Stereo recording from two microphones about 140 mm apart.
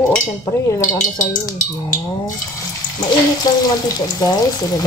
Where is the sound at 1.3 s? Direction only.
25° left (ahead or behind).